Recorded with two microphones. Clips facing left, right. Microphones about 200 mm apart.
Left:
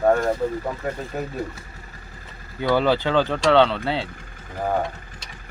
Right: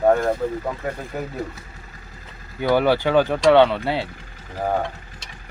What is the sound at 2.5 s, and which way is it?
Speech, 15° right (ahead or behind).